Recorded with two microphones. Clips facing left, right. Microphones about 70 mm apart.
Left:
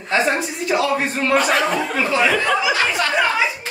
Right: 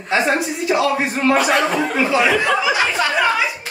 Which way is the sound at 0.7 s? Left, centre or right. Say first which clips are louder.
Right 1 dB; centre.